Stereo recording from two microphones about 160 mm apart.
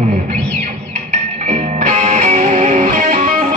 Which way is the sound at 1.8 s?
50° right (ahead or behind).